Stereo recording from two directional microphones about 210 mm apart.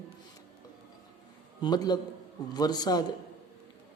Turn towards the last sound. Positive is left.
turn(degrees=20)  # may be behind; listen again after turning